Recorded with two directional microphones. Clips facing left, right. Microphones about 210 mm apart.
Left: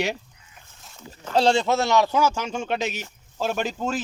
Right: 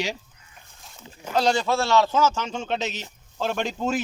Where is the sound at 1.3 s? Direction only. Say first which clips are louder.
Left 2 dB; 30° left (ahead or behind); by 3.9 s 5° left (ahead or behind).